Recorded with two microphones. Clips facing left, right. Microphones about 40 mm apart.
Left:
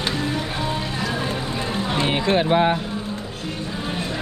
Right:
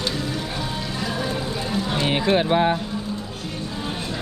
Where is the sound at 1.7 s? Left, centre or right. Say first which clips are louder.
Even; left.